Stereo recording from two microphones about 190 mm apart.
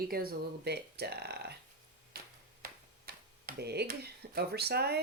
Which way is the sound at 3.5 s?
60° right (ahead or behind).